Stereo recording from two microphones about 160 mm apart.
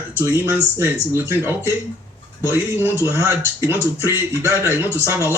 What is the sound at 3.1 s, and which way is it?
Speech, 15° right (ahead or behind).